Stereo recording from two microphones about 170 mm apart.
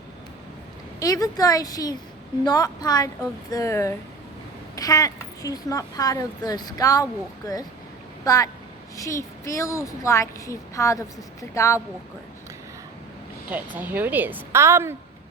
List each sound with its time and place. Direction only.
0.9 s a woman's voice: 20° left (ahead or behind)
13.5 s a woman's voice: 10° right (ahead or behind)